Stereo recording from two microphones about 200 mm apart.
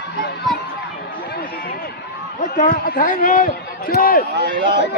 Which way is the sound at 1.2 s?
50° left (ahead or behind).